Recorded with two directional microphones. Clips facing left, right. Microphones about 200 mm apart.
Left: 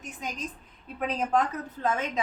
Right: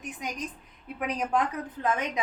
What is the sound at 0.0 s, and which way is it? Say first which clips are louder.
A woman's voice: right 1 dB; 15° right (ahead or behind).